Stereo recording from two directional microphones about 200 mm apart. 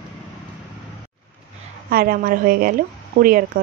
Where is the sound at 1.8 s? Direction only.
50° right (ahead or behind).